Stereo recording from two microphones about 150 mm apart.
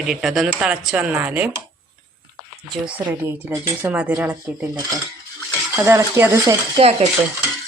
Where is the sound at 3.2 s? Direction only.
20° right (ahead or behind).